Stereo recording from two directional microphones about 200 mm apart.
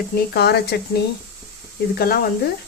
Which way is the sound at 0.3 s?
55° left (ahead or behind).